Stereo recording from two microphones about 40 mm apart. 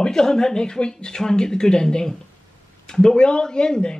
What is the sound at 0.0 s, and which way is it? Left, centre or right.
Speech, centre.